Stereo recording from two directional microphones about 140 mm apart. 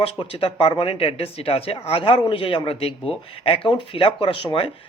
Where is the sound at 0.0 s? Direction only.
40° left (ahead or behind).